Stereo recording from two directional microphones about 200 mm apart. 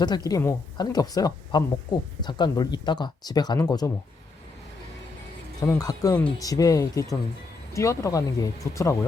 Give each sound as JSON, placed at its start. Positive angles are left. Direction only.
{"t": 0.3, "sound": "speech", "side_deg": 15}
{"t": 5.5, "sound": "speech", "side_deg": 20}